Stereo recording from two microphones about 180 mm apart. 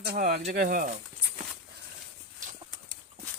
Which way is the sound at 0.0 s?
60° right (ahead or behind).